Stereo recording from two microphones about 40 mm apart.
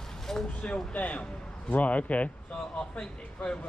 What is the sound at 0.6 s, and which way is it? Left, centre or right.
A man's voice, left.